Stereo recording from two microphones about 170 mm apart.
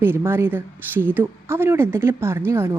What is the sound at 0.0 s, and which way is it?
Speech, 15° right (ahead or behind).